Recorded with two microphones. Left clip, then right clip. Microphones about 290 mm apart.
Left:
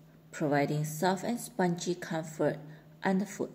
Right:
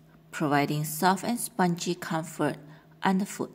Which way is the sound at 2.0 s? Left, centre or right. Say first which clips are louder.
Right 2 dB; right.